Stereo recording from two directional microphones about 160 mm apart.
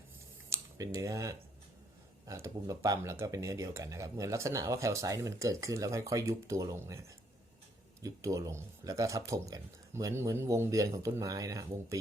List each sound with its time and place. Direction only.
0.5 s speech: 20° right (ahead or behind)
8.0 s speech: 20° right (ahead or behind)